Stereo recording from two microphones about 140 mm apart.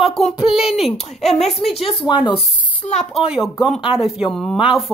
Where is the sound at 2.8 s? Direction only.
50° left (ahead or behind).